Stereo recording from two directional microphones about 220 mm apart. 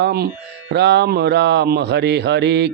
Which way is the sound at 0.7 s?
50° right (ahead or behind).